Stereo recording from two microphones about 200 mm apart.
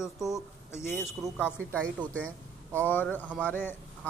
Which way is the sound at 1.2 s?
5° right (ahead or behind).